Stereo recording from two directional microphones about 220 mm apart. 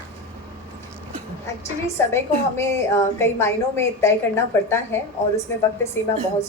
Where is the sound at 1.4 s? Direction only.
10° left (ahead or behind).